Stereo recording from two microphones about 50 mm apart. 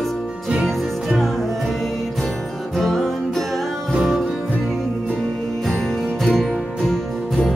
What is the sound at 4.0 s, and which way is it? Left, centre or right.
Music, centre.